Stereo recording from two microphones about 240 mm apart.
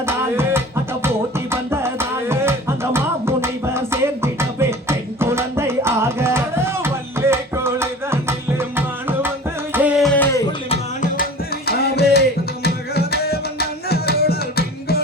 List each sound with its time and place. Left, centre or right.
0.0 s music: centre
10.1 s music: centre
10.7 s music: left
12.6 s tabla: left